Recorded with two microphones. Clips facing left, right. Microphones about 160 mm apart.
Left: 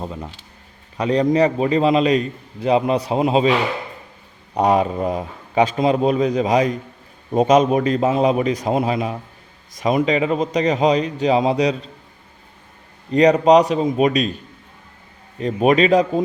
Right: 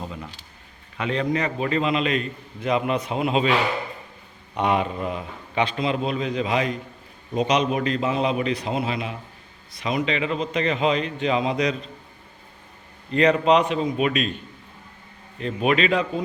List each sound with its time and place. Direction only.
0.0 s a man's voice: 35° left (ahead or behind)
4.5 s a man's voice: 40° left (ahead or behind)
13.1 s a man's voice: 40° left (ahead or behind)
15.4 s a man's voice: 40° left (ahead or behind)